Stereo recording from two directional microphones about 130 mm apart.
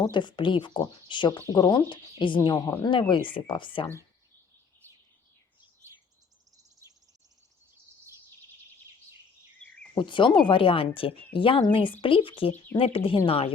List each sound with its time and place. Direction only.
0.0 s speech: 35° left (ahead or behind)
9.9 s a woman's voice: 40° left (ahead or behind)